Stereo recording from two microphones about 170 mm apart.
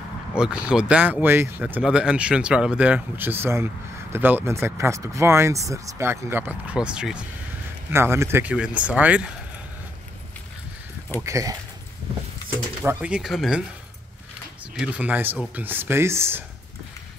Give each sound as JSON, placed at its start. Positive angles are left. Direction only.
{"t": 0.4, "sound": "speech", "side_deg": -5}
{"t": 11.1, "sound": "speech", "side_deg": -20}
{"t": 12.8, "sound": "speech", "side_deg": -5}
{"t": 14.8, "sound": "speech", "side_deg": -10}